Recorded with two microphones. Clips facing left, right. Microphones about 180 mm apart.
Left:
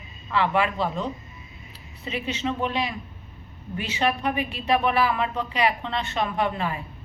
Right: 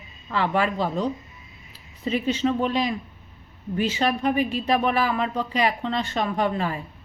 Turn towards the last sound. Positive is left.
turn(degrees=-40)  # may be behind; listen again after turning